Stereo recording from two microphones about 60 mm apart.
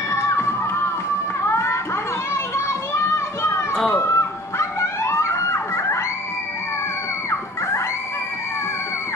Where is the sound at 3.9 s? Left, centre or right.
Left.